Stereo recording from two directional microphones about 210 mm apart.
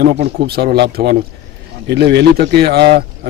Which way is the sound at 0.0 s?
50° right (ahead or behind).